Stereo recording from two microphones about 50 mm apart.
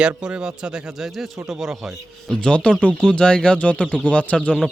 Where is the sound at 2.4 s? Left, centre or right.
Left.